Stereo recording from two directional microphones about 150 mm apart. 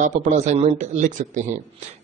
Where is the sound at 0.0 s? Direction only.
55° right (ahead or behind).